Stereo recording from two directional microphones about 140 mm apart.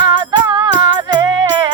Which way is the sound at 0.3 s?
30° right (ahead or behind).